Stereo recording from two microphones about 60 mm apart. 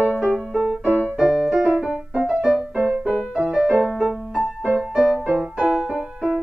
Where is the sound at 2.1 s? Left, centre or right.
Centre.